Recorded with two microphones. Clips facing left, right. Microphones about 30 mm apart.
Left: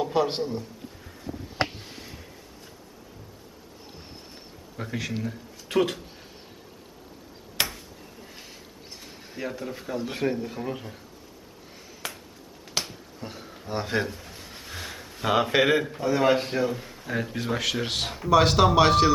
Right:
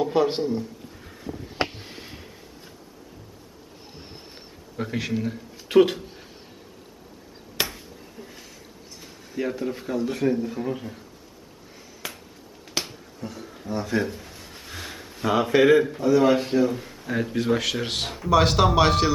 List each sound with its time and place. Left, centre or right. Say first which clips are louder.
0.0 s speech: right 3 dB; centre
1.0 s a sound: right 2 dB; centre
4.8 s a man's voice: right 4 dB; centre
7.6 s a sound: even; centre
9.4 s speech: right 6 dB; centre
10.1 s speech: right 3 dB; left
10.3 s speech: right 4 dB; centre
12.0 s finger snapping: even; centre
13.2 s a sound: right 3 dB; left
13.7 s speech: right 2 dB; left
14.1 s a sound: right 2 dB; centre
15.2 s a man's voice: right 3 dB; centre
16.2 s speech: right 2 dB; left
16.5 s speech: right 4 dB; centre